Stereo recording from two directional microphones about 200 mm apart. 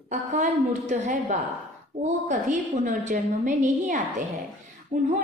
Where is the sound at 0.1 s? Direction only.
35° right (ahead or behind).